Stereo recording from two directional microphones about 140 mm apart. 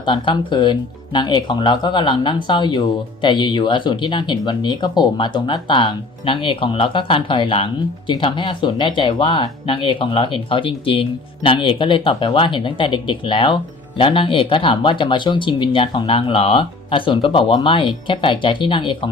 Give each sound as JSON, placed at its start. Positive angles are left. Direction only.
{"t": 0.0, "sound": "speech", "side_deg": 35}